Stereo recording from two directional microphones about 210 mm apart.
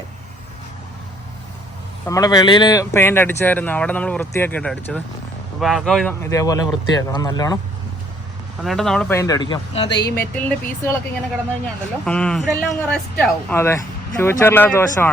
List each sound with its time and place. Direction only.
2.0 s speech: 15° left (ahead or behind)
6.3 s speech: 15° left (ahead or behind)
8.6 s speech: centre (ahead or behind); by 10.0 s 20° left (ahead or behind)
10.2 s speech: 5° left (ahead or behind)
12.0 s speech: 5° left (ahead or behind)